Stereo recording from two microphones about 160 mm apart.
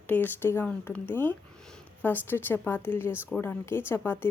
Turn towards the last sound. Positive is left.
turn(degrees=15)  # may be behind; listen again after turning